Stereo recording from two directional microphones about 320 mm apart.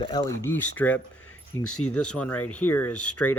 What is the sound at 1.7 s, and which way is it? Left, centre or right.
Speech, left.